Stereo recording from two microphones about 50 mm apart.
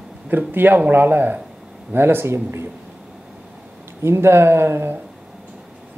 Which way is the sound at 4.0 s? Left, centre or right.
Right.